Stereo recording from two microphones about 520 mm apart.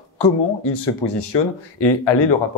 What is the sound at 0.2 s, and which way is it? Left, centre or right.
Speech, left.